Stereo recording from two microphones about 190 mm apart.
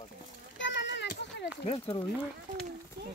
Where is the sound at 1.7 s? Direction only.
30° left (ahead or behind).